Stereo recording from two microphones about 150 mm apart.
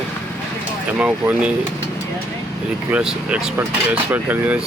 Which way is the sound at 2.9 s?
5° right (ahead or behind).